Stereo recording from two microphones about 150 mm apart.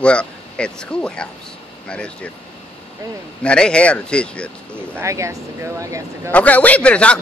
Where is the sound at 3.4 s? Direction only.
5° left (ahead or behind).